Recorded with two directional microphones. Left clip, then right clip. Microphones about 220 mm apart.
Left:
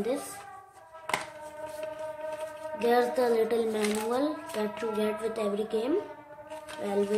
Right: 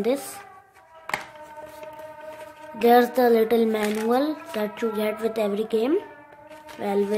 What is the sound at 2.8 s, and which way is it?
A woman's voice, 40° right (ahead or behind).